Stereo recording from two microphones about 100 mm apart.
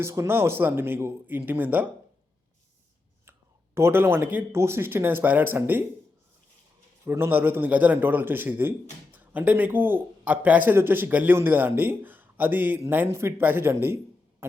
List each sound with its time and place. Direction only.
0.0 s a man's voice: 25° right (ahead or behind)
3.8 s a man's voice: 25° right (ahead or behind)
7.0 s a man's voice: 25° right (ahead or behind)